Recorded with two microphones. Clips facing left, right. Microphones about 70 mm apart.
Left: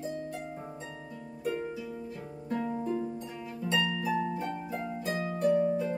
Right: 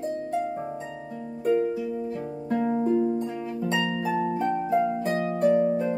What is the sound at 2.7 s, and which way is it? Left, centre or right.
Music, right.